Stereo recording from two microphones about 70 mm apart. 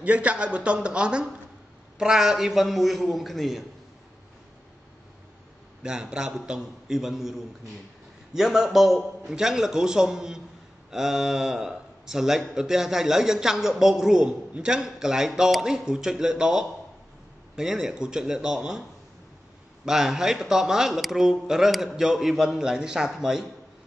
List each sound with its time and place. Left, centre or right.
0.0 s a man's voice: centre
5.8 s a man's voice: centre